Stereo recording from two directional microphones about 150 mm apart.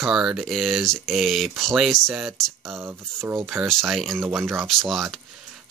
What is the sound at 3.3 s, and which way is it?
Speech, 15° right (ahead or behind).